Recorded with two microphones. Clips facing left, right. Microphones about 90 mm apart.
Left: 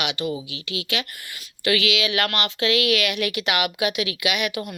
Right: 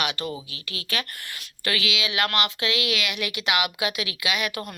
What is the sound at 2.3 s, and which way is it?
Speech, 30° left (ahead or behind).